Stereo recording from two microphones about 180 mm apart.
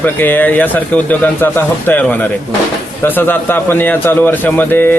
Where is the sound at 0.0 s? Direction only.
10° left (ahead or behind).